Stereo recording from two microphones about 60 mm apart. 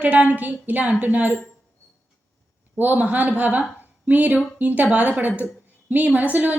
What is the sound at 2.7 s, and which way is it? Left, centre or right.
A woman's voice, right.